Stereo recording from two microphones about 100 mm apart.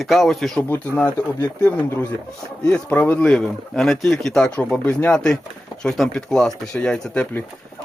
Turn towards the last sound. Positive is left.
turn(degrees=15)  # may be behind; listen again after turning